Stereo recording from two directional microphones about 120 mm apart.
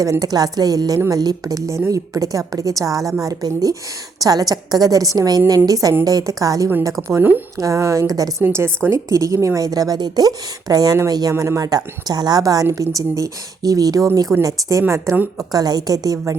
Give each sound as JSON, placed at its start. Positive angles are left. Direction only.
{"t": 0.0, "sound": "a woman's voice", "side_deg": -30}
{"t": 7.1, "sound": "speech", "side_deg": -15}
{"t": 8.4, "sound": "a woman's voice", "side_deg": -20}